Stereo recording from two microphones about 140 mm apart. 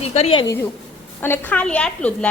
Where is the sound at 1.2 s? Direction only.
15° left (ahead or behind).